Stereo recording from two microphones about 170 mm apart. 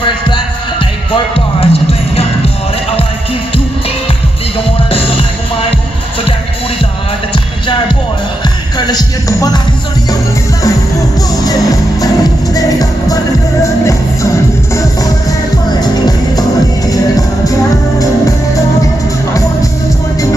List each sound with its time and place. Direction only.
0.7 s music: 30° left (ahead or behind)
4.9 s music: 35° left (ahead or behind)
8.7 s music: 25° left (ahead or behind)
11.4 s music: 20° left (ahead or behind)
15.8 s music: 20° left (ahead or behind)